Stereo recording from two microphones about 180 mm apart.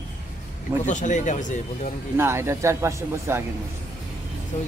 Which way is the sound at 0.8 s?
45° left (ahead or behind).